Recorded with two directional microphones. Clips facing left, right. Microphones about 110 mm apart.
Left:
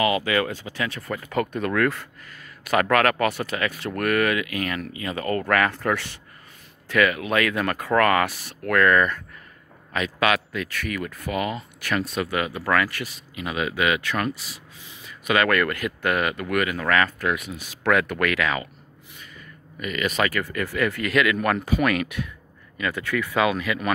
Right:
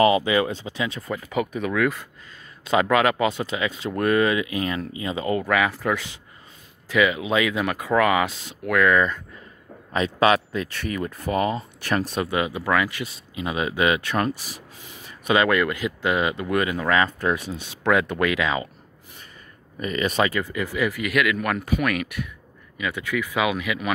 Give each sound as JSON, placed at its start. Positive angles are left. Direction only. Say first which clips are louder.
{"t": 0.0, "sound": "speech", "louder": "right 4 dB", "side_deg": -20}
{"t": 5.4, "sound": "speech", "louder": "even", "side_deg": -5}
{"t": 9.9, "sound": "speech", "louder": "right 4 dB", "side_deg": -30}
{"t": 19.8, "sound": "speech", "louder": "right 2 dB", "side_deg": -30}